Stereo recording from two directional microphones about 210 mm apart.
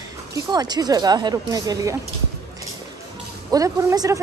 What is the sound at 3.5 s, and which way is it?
Speech, 15° right (ahead or behind).